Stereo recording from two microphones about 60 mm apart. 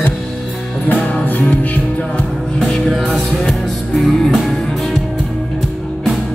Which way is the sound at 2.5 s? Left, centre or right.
Centre.